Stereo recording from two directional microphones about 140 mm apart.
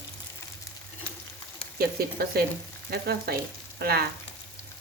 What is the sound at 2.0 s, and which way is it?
Speech, 90° right.